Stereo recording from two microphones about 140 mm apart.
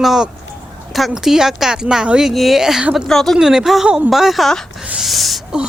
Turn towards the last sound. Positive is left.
turn(degrees=0)  # may be behind; listen again after turning